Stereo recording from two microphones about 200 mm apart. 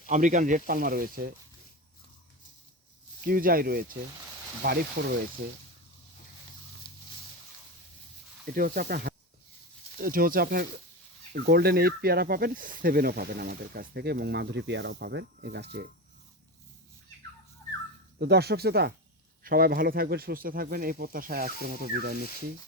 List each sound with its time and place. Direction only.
0.1 s speech: 40° right (ahead or behind)
3.2 s speech: 45° right (ahead or behind)
8.4 s speech: 45° right (ahead or behind)
18.2 s speech: 55° right (ahead or behind)